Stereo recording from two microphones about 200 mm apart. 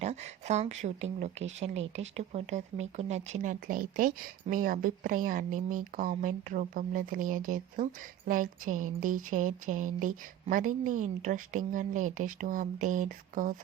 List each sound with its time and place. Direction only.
0.0 s speech: 35° right (ahead or behind)